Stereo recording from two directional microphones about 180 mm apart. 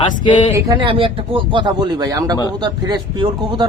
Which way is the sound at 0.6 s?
20° right (ahead or behind).